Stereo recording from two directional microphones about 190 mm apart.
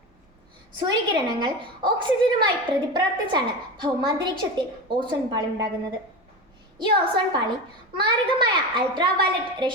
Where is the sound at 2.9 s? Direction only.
25° right (ahead or behind).